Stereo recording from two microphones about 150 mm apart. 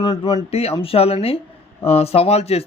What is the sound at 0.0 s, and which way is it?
Speech, 30° left (ahead or behind).